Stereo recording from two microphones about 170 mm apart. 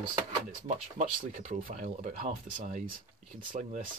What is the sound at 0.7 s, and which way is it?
Speech, 45° right (ahead or behind).